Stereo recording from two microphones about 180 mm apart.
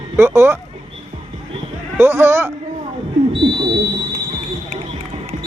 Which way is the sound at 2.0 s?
10° right (ahead or behind).